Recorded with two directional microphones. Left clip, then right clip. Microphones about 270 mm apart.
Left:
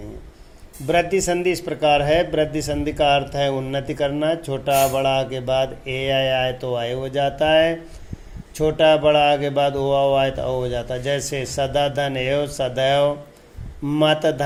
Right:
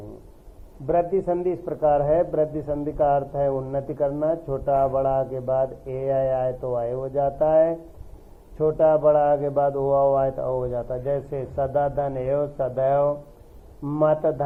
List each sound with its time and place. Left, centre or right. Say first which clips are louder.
0.9 s speech: left 3 dB; left